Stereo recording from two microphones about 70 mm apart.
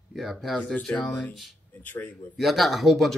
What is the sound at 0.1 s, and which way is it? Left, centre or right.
Speech, centre.